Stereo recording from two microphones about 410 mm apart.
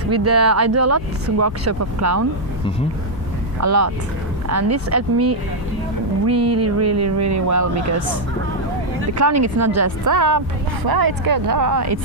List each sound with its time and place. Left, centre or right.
0.1 s speech: right
3.6 s speech: right
9.1 s speech: right
10.8 s speech: right